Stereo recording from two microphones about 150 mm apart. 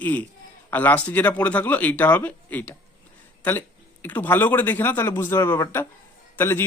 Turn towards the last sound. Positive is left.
turn(degrees=15)  # may be behind; listen again after turning